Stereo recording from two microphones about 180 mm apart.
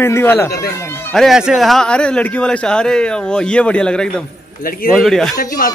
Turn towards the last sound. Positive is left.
turn(degrees=55)  # may be behind; listen again after turning